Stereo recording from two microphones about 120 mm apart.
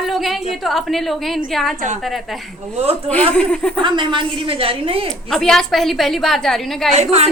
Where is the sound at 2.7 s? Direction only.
60° right (ahead or behind).